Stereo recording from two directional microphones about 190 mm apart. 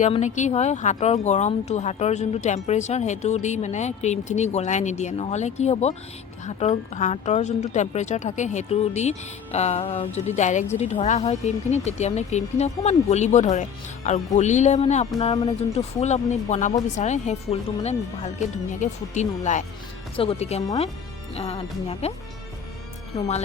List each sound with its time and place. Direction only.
0.0 s speech: 40° left (ahead or behind)